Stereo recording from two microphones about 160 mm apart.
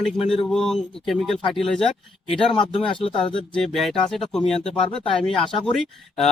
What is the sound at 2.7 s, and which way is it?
Speech, 30° left (ahead or behind).